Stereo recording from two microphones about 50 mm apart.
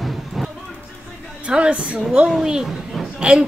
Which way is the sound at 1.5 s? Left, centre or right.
Right.